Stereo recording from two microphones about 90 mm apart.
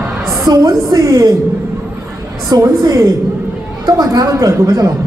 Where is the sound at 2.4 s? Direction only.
45° right (ahead or behind).